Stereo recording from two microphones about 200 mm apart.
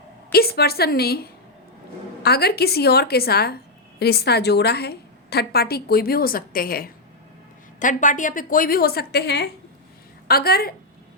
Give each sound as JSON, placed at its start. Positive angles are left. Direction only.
{"t": 0.3, "sound": "a woman's voice", "side_deg": 50}